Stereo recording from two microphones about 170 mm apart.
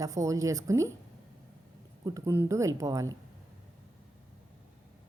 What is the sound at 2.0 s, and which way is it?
A woman's voice, 15° right (ahead or behind).